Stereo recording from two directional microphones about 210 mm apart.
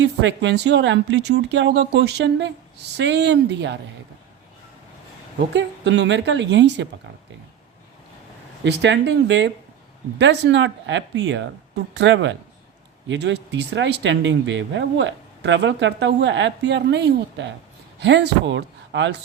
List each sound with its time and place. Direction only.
0.0 s speech: 60° right (ahead or behind)
5.5 s speech: 55° right (ahead or behind)
8.6 s speech: 55° right (ahead or behind)